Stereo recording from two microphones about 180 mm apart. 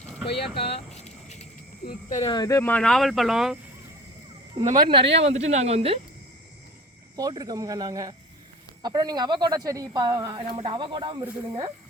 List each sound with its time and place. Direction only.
0.3 s speech: 65° left (ahead or behind)
0.8 s a sound: 40° left (ahead or behind)
1.8 s speech: 50° left (ahead or behind)
2.2 s speech: 20° left (ahead or behind); by 3.6 s 5° right (ahead or behind)
4.5 s speech: 45° right (ahead or behind)
4.9 s speech: 30° right (ahead or behind)
7.2 s speech: 20° right (ahead or behind)